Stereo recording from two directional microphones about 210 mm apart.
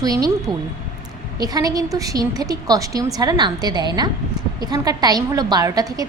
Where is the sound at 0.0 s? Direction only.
15° right (ahead or behind).